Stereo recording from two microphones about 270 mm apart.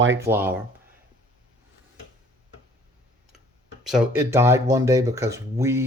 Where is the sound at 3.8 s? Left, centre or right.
Centre.